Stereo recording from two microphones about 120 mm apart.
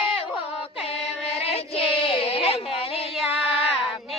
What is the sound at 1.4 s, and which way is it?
Child singing, 55° left (ahead or behind).